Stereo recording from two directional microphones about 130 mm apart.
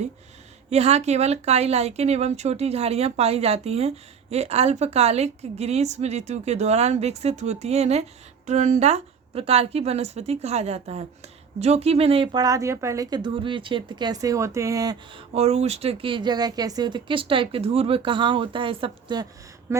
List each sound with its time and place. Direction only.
0.7 s speech: 55° right (ahead or behind)
8.4 s speech: 65° right (ahead or behind); by 12.3 s 45° right (ahead or behind)
12.3 s speech: 30° right (ahead or behind)
15.4 s speech: 55° right (ahead or behind); by 19.3 s 35° right (ahead or behind)